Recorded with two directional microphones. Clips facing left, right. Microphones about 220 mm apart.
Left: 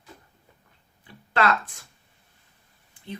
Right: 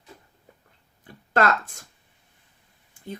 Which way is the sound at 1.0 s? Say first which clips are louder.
Right 2 dB; 45° right (ahead or behind).